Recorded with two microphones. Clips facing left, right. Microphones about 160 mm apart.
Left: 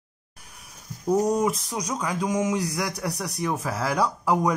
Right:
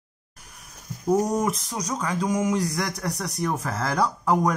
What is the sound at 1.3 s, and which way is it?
Speech, 10° left (ahead or behind).